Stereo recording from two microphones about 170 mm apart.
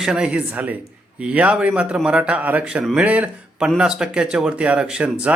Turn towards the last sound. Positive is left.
turn(degrees=-5)  # may be behind; listen again after turning